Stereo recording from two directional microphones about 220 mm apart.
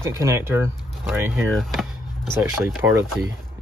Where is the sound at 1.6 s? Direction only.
Centre (ahead or behind).